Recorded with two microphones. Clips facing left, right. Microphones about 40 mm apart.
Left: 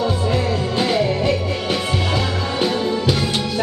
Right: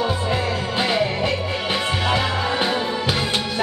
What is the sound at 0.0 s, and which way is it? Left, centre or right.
Music, centre.